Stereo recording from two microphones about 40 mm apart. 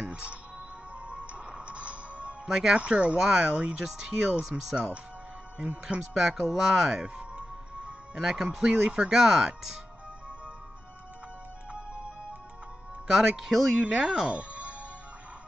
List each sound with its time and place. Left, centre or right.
0.1 s speech: right
1.0 s music: right
2.4 s speech: centre
2.7 s speech: right
3.2 s speech: centre
5.9 s speech: centre
8.1 s speech: centre
8.6 s speech: right
9.1 s speech: centre
13.1 s speech: centre
13.8 s speech: right
14.2 s music: right